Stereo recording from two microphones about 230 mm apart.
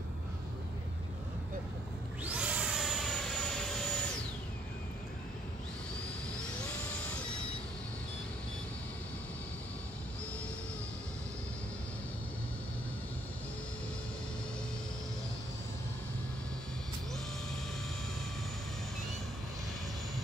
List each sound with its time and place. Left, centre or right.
2.2 s vehicle: centre